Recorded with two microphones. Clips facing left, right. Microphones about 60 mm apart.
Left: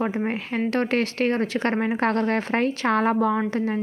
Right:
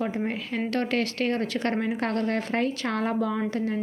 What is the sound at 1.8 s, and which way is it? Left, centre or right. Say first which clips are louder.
A woman's voice: left 4 dB; left.